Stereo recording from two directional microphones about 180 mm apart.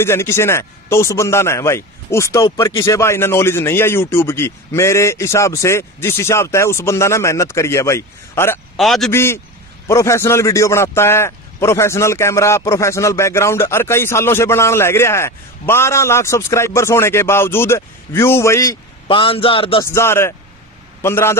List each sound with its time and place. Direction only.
0.0 s a man's voice: 15° left (ahead or behind)
8.7 s a man's voice: centre (ahead or behind)
9.1 s a man's voice: 15° left (ahead or behind)
19.0 s a man's voice: 30° left (ahead or behind)
19.8 s a man's voice: 15° left (ahead or behind)